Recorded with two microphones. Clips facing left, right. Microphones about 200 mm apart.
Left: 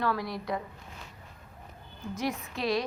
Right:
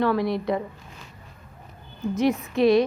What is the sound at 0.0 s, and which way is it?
Speech, 25° right (ahead or behind).